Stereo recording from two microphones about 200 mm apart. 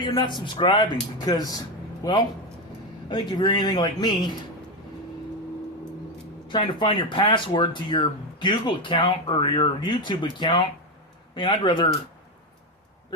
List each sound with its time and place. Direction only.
0.0 s a man's voice: 20° left (ahead or behind)
6.5 s speech: 25° left (ahead or behind)